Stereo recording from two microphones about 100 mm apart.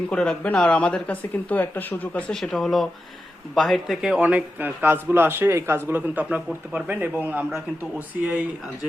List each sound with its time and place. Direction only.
0.1 s speech: 10° left (ahead or behind)
2.4 s a man's voice: 5° left (ahead or behind)